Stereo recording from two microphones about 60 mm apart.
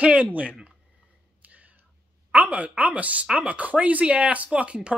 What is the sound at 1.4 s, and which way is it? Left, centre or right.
Whispering, right.